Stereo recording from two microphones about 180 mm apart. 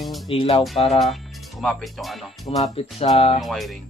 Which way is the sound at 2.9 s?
35° left (ahead or behind).